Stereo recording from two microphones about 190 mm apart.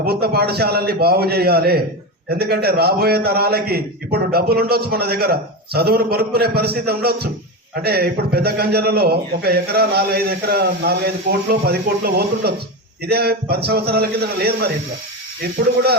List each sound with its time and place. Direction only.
0.0 s a man's voice: 55° right (ahead or behind)